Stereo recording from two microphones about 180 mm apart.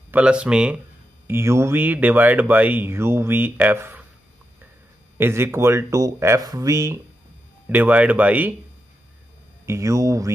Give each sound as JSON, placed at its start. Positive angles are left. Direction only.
{"t": 0.1, "sound": "speech", "side_deg": -5}
{"t": 5.1, "sound": "speech", "side_deg": -15}
{"t": 9.7, "sound": "speech", "side_deg": -15}